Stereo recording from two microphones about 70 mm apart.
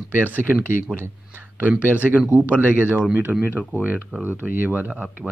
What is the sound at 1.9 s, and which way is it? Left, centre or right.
Speech, right.